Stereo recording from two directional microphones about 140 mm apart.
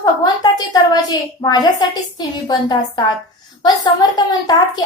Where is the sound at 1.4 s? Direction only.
30° left (ahead or behind).